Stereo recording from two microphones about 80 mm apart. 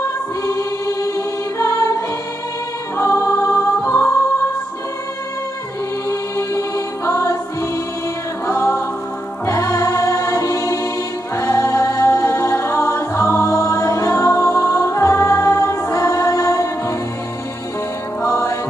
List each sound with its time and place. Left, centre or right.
0.0 s choir: left
3.0 s music: left
6.0 s choir: left
7.1 s music: left
8.5 s music: left
18.2 s music: left